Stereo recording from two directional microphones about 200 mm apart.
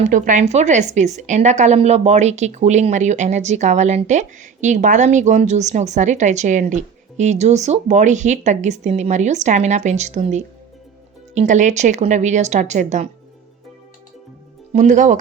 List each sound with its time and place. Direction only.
0.0 s a woman's voice: 40° right (ahead or behind)
14.7 s a woman's voice: 35° right (ahead or behind)